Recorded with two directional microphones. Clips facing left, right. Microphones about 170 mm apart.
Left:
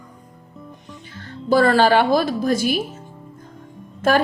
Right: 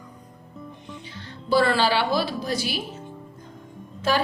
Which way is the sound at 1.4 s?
45° left (ahead or behind).